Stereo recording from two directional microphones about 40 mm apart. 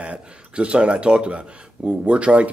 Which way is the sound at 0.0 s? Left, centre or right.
Right.